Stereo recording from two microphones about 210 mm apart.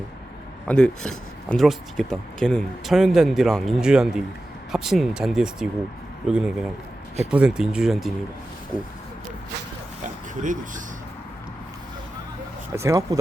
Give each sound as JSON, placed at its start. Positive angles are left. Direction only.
{"t": 0.7, "sound": "speech", "side_deg": 5}
{"t": 10.4, "sound": "speech", "side_deg": -40}
{"t": 12.7, "sound": "speech", "side_deg": -15}